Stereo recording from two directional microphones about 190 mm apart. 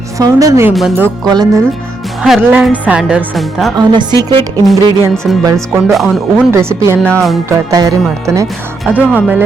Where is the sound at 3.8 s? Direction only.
25° right (ahead or behind).